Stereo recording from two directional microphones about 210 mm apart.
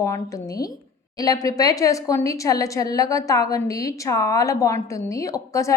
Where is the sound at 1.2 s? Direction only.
15° left (ahead or behind).